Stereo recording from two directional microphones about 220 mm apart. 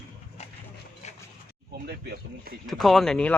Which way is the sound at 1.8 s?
45° right (ahead or behind).